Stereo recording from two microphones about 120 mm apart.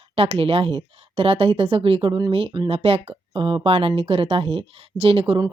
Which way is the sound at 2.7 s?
55° right (ahead or behind).